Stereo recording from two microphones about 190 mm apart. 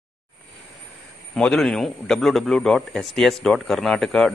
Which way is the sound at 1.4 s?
5° left (ahead or behind).